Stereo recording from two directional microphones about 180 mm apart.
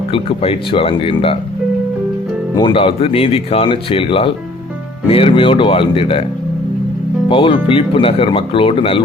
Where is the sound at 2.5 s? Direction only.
25° left (ahead or behind).